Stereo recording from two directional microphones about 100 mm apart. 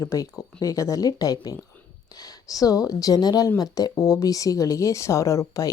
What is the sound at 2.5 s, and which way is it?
Speech, 35° left (ahead or behind).